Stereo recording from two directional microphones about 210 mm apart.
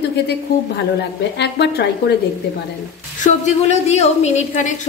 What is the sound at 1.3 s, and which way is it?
Speech, 50° left (ahead or behind).